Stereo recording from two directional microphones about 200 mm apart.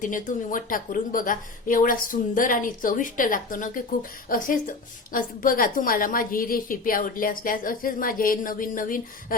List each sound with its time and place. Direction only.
0.0 s speech: 40° left (ahead or behind)